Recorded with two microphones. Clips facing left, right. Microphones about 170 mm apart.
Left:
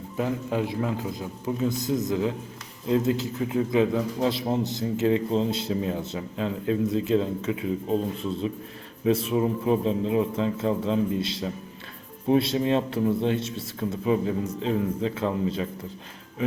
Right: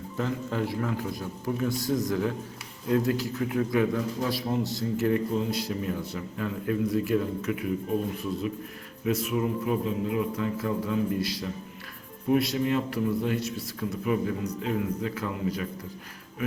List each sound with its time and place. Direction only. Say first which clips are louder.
0.2 s a man's voice: left 3 dB; 15° left (ahead or behind)